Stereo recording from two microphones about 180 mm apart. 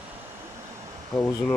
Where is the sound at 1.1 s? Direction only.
10° left (ahead or behind).